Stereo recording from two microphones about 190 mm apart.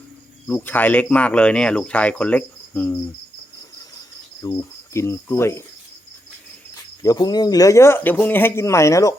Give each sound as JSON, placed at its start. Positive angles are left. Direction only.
{"t": 0.4, "sound": "speech", "side_deg": 10}
{"t": 4.4, "sound": "cricket", "side_deg": 25}
{"t": 4.9, "sound": "speech", "side_deg": 15}
{"t": 7.0, "sound": "speech", "side_deg": 20}